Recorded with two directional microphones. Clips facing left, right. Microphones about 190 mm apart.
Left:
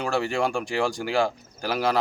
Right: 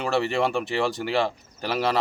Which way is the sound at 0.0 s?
Centre (ahead or behind).